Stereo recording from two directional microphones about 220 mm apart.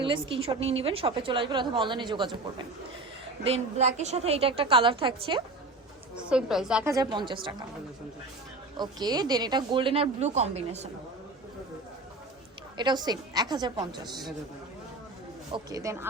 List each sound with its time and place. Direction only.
0.0 s a woman's voice: 25° right (ahead or behind)
3.4 s a woman's voice: 30° right (ahead or behind)
6.1 s a woman's voice: 5° right (ahead or behind)
6.9 s a woman's voice: 20° right (ahead or behind)
8.8 s a woman's voice: 20° right (ahead or behind)
12.7 s a woman's voice: 20° right (ahead or behind)
15.5 s speech: 15° right (ahead or behind)